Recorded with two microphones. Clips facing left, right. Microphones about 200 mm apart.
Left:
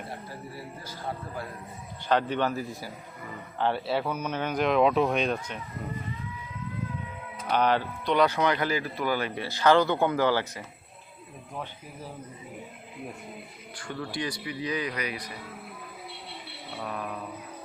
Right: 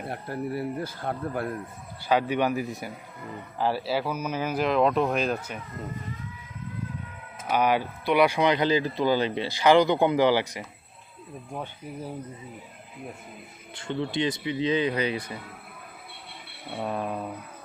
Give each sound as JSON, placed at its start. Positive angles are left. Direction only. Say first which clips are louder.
{"t": 0.1, "sound": "speech", "louder": "right 9 dB", "side_deg": -60}
{"t": 2.0, "sound": "speech", "louder": "right 2 dB", "side_deg": -10}
{"t": 3.6, "sound": "speech", "louder": "right 1 dB", "side_deg": -5}
{"t": 7.4, "sound": "speech", "louder": "right 1 dB", "side_deg": -10}
{"t": 13.7, "sound": "speech", "louder": "right 6 dB", "side_deg": -25}
{"t": 16.8, "sound": "speech", "louder": "right 5 dB", "side_deg": -30}